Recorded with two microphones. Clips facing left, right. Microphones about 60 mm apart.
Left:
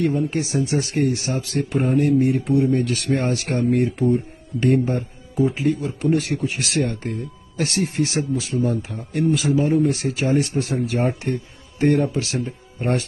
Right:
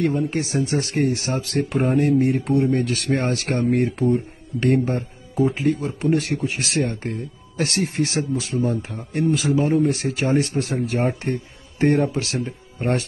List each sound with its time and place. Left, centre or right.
0.0 s speech: right
2.8 s speech: right
6.3 s speech: right
9.3 s speech: right